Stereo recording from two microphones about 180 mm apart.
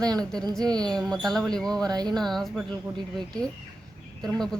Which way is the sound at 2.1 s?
Centre (ahead or behind).